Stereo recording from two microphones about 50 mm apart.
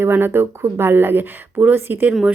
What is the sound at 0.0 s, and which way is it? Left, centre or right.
Speech, right.